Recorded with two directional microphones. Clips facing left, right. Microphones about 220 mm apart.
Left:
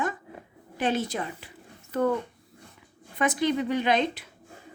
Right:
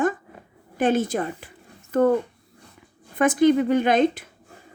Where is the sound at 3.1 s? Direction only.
50° right (ahead or behind).